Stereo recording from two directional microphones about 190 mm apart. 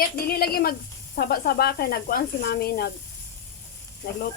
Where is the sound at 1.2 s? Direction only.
55° left (ahead or behind).